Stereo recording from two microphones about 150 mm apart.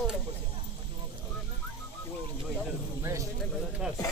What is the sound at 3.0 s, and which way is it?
Speech, 20° right (ahead or behind).